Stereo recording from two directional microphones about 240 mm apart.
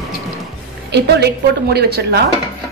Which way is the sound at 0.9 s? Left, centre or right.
Right.